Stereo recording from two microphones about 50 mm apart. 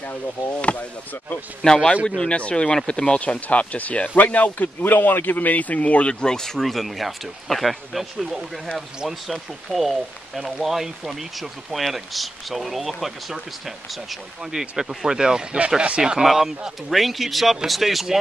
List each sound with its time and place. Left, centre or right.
0.6 s speech: left
1.6 s speech: centre
6.2 s speech: centre